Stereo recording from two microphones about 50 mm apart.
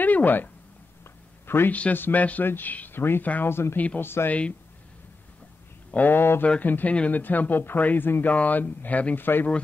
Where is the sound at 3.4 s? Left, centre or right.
Left.